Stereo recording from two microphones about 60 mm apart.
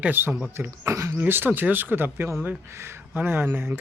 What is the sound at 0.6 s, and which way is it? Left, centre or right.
Speech, right.